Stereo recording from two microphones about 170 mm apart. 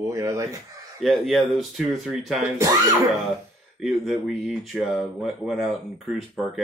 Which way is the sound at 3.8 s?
Centre (ahead or behind).